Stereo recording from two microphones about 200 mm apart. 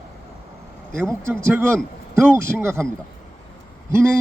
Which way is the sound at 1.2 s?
10° right (ahead or behind).